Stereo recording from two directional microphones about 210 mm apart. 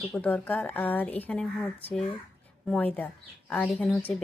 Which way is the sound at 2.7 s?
5° left (ahead or behind).